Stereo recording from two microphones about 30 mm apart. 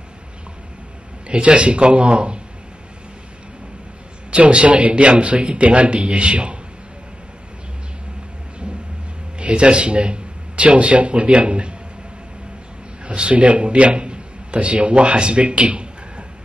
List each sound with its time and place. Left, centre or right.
1.2 s a man's voice: right
4.3 s a man's voice: right
9.4 s speech: right
11.3 s a sound: right
13.0 s a man's voice: right